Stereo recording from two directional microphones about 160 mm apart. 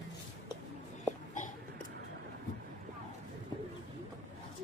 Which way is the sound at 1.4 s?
50° left (ahead or behind).